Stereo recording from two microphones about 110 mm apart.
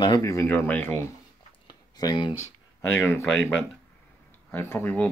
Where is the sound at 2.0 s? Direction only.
40° left (ahead or behind).